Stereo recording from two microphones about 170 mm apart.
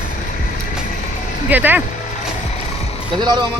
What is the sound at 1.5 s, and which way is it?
Speech, 10° right (ahead or behind).